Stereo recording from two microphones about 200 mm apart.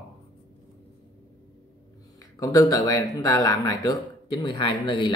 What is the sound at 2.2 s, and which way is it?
Speech, 15° left (ahead or behind).